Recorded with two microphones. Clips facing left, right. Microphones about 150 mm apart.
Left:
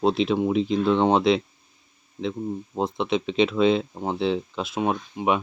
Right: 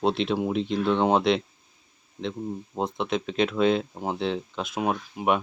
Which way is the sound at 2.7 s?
Centre (ahead or behind).